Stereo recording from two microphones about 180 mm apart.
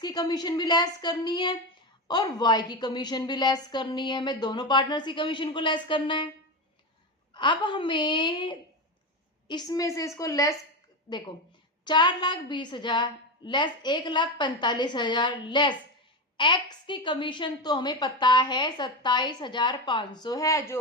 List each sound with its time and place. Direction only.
0.0 s a woman's voice: 20° left (ahead or behind)
7.3 s a woman's voice: 25° left (ahead or behind)